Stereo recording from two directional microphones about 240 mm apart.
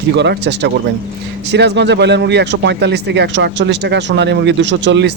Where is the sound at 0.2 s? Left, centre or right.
Right.